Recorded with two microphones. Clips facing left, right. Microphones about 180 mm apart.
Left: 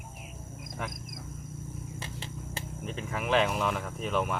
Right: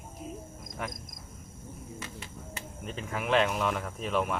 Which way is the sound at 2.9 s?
Centre (ahead or behind).